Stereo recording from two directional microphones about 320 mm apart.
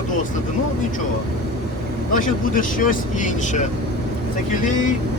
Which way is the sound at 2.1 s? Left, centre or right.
Left.